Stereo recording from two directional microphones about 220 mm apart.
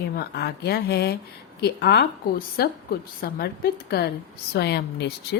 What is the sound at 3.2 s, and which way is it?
A woman's voice, 45° left (ahead or behind).